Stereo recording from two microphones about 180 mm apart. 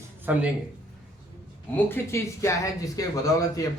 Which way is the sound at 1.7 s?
15° left (ahead or behind).